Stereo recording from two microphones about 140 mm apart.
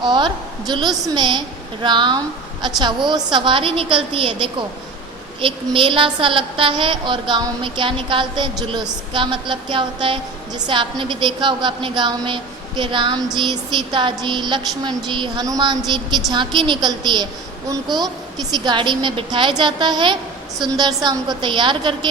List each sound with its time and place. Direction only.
0.0 s a woman's voice: 35° right (ahead or behind)
18.5 s a woman's voice: 35° right (ahead or behind)